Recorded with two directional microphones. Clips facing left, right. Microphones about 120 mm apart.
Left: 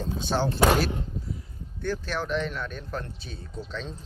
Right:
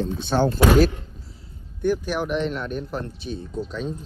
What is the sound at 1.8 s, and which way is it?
Speech, 15° right (ahead or behind).